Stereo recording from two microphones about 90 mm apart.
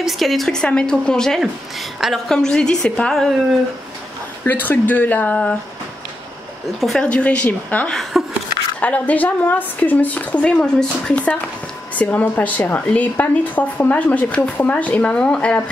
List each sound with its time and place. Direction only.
0.0 s a woman's voice: centre (ahead or behind)
2.2 s a woman's voice: 5° left (ahead or behind)
4.5 s speech: 20° left (ahead or behind)
6.8 s a woman's voice: centre (ahead or behind)
7.1 s a woman's voice: 15° left (ahead or behind)
7.9 s a woman's voice: centre (ahead or behind)
8.7 s a woman's voice: 15° left (ahead or behind)